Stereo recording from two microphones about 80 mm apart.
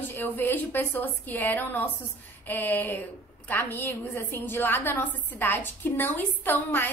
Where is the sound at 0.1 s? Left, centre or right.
Left.